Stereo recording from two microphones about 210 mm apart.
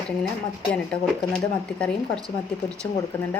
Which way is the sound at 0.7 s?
5° left (ahead or behind).